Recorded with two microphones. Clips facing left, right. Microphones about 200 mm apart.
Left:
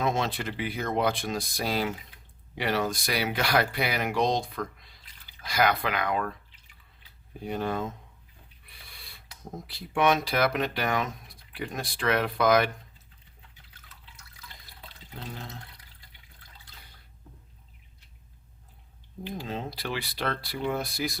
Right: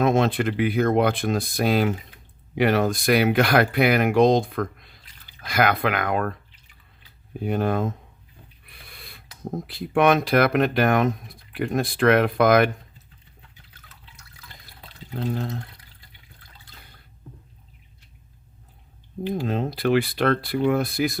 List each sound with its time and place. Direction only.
0.0 s speech: 55° right (ahead or behind)
7.4 s speech: 60° right (ahead or behind)
15.1 s speech: 55° right (ahead or behind)
19.4 s speech: 55° right (ahead or behind)